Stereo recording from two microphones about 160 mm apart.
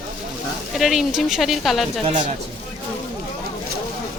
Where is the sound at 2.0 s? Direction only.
30° right (ahead or behind).